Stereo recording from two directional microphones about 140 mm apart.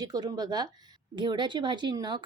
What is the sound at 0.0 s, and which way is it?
Speech, 30° right (ahead or behind).